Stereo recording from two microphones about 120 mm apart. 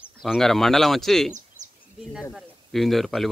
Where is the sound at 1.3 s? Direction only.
90° right.